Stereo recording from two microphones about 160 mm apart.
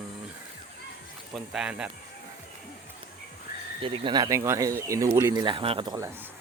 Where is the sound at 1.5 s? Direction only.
5° right (ahead or behind).